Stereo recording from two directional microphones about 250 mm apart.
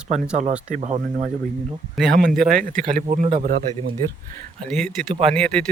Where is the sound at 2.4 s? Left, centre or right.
Right.